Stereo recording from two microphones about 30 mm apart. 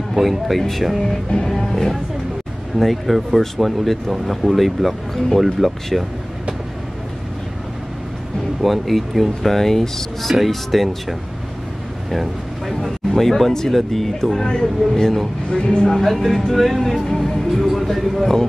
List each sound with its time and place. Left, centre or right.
0.2 s speech: centre
1.0 s speech: centre
8.6 s speech: centre
12.1 s speech: centre
15.5 s speech: left
15.9 s speech: centre